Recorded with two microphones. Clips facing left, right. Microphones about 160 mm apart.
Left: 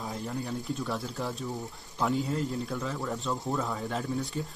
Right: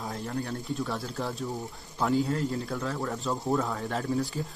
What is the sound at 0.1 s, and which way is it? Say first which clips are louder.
Speech: right 1 dB; centre (ahead or behind).